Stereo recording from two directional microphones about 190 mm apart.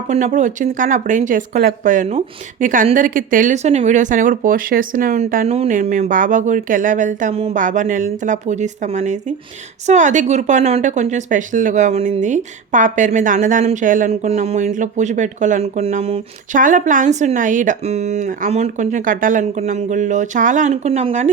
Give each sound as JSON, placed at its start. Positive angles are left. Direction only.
{"t": 0.1, "sound": "a woman's voice", "side_deg": -40}
{"t": 16.6, "sound": "a woman's voice", "side_deg": -45}